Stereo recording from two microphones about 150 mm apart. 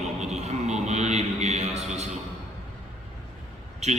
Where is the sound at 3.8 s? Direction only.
50° right (ahead or behind).